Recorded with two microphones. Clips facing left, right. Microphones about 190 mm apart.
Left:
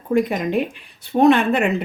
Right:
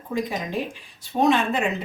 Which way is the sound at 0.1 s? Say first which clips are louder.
Left 8 dB; 60° left (ahead or behind).